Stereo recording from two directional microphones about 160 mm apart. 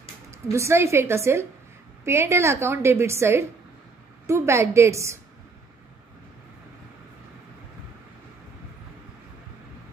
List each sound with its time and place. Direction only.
0.3 s a woman's voice: 15° right (ahead or behind)